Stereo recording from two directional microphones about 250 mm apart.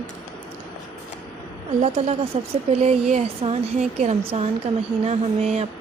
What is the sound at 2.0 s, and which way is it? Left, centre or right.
A woman's voice, right.